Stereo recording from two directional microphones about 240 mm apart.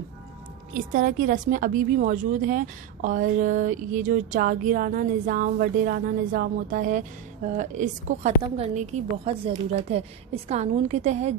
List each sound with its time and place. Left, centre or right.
0.7 s a woman's voice: right